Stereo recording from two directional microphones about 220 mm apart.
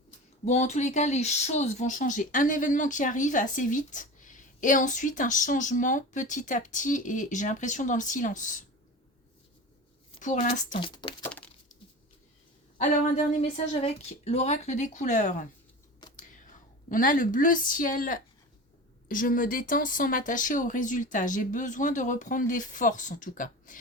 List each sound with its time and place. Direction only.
0.4 s speech: 30° left (ahead or behind)
10.2 s speech: 35° left (ahead or behind)
10.8 s speech: 20° left (ahead or behind)
11.2 s a sound: 5° left (ahead or behind)
12.8 s speech: 30° left (ahead or behind)